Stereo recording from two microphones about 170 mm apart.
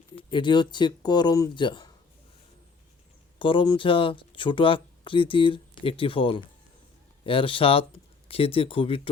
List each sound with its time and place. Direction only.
0.3 s speech: 30° left (ahead or behind)
3.3 s speech: 30° left (ahead or behind)